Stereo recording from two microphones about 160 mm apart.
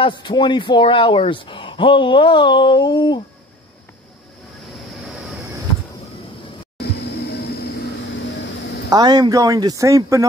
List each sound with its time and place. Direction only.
0.0 s speech: 30° left (ahead or behind)
6.8 s a sound: 90° left
8.9 s speech: 25° right (ahead or behind)